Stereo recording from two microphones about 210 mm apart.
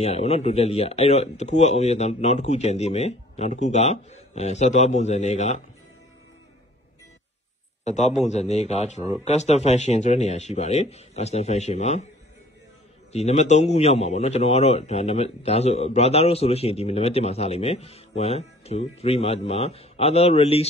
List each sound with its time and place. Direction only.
0.0 s speech: 30° left (ahead or behind)
7.8 s speech: 35° left (ahead or behind)
13.1 s a man's voice: 30° left (ahead or behind)